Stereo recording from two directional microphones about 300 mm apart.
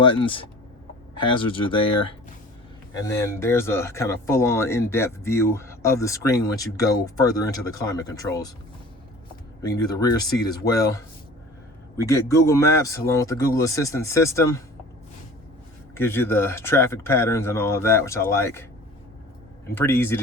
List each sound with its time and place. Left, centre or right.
0.0 s speech: centre
2.9 s speech: centre
9.6 s speech: centre
12.0 s speech: centre
16.0 s speech: centre
19.7 s speech: centre